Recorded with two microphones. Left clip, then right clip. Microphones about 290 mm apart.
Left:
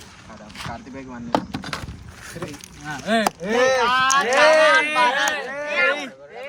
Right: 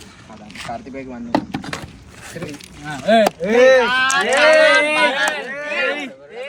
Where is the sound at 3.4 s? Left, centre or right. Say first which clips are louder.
Right 6 dB; centre.